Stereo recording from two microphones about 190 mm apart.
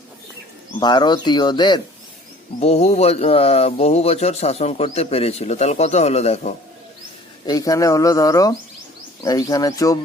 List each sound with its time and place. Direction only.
0.8 s speech: 25° left (ahead or behind)
7.4 s speech: 20° left (ahead or behind)